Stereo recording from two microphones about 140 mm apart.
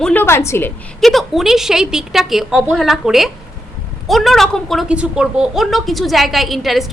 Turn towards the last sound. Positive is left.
turn(degrees=0)  # may be behind; listen again after turning